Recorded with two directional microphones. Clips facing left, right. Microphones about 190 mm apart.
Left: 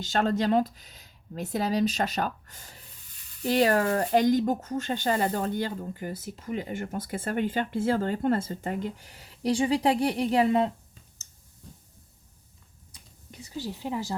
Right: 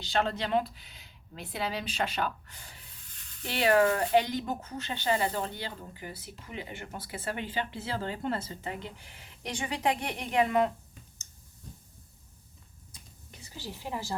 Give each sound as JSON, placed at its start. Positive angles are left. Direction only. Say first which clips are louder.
{"t": 0.0, "sound": "speech", "louder": "left 5 dB", "side_deg": 45}
{"t": 13.4, "sound": "a woman's voice", "louder": "left 8 dB", "side_deg": 20}